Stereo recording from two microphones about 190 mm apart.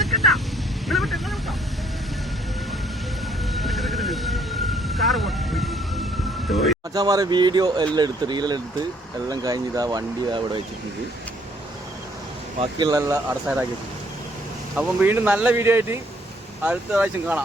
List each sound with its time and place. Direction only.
0.0 s vehicle: centre (ahead or behind)
3.5 s vehicle: centre (ahead or behind)
6.9 s speech: 20° right (ahead or behind)
12.5 s speech: 20° right (ahead or behind)
14.8 s speech: 10° right (ahead or behind)